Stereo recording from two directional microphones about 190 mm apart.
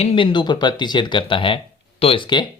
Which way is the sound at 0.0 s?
30° left (ahead or behind).